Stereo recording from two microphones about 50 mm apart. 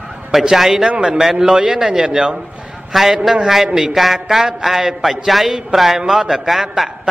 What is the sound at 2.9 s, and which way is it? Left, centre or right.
A man's voice, centre.